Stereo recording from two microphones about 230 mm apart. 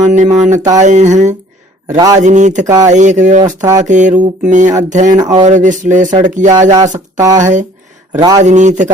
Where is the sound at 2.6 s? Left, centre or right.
Centre.